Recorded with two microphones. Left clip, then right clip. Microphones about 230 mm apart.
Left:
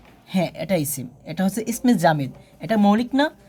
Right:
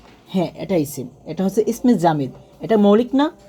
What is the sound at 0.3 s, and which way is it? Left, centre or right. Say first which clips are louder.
Speech: right 1 dB; left.